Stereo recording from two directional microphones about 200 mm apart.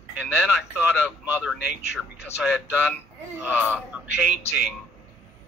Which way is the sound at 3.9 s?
5° right (ahead or behind).